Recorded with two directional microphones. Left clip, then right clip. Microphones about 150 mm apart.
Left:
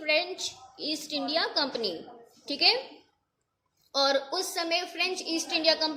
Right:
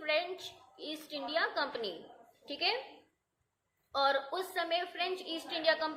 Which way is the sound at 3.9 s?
35° left (ahead or behind).